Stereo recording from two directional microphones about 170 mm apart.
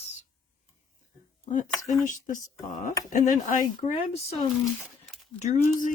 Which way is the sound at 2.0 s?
50° left (ahead or behind).